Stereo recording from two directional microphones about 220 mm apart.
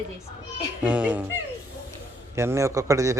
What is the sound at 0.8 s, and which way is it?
Speech, 5° right (ahead or behind).